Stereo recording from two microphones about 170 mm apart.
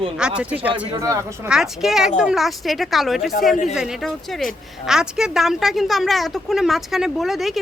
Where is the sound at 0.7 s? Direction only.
20° right (ahead or behind).